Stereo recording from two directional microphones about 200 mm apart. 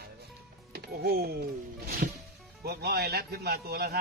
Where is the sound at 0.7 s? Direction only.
50° right (ahead or behind).